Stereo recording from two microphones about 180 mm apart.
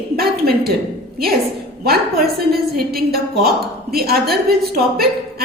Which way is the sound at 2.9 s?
60° right (ahead or behind).